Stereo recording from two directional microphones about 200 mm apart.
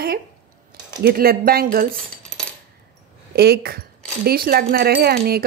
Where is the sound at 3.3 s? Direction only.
50° right (ahead or behind).